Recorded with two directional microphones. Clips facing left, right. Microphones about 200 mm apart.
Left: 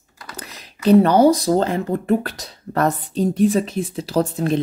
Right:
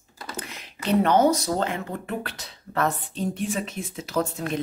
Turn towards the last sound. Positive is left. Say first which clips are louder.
# left 7 dB
turn(degrees=35)  # may be behind; listen again after turning